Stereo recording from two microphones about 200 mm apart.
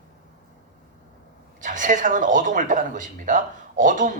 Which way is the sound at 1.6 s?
40° right (ahead or behind).